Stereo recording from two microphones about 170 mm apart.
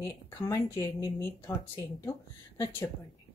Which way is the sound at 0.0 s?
15° left (ahead or behind).